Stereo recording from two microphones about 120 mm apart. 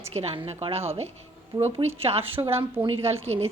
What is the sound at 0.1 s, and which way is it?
A woman's voice, 60° right (ahead or behind).